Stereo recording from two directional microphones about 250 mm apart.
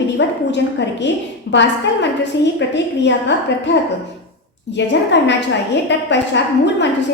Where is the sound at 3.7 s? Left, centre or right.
Left.